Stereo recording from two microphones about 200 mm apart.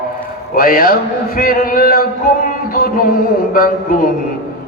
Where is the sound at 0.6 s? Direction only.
45° left (ahead or behind).